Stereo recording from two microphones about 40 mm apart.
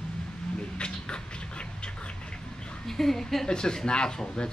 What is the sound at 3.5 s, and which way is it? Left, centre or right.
Speech, centre.